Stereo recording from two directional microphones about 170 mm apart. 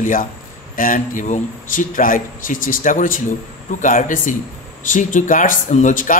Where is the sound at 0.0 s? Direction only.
55° left (ahead or behind).